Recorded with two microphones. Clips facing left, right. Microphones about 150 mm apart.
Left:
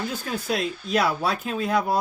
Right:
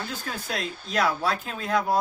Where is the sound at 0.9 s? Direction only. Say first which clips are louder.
Left 1 dB; 10° left (ahead or behind).